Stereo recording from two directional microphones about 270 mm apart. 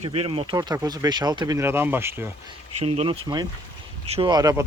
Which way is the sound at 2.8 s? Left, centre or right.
Right.